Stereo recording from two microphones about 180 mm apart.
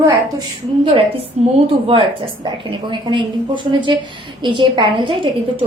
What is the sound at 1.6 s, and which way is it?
A woman's voice, 30° right (ahead or behind).